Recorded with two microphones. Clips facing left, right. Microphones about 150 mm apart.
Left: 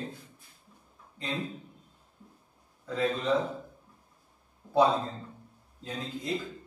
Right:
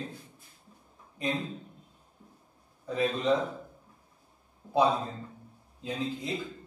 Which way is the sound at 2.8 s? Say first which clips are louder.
Right 1 dB; 15° right (ahead or behind).